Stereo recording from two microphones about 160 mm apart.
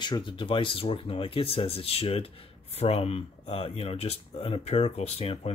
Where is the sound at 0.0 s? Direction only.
30° left (ahead or behind).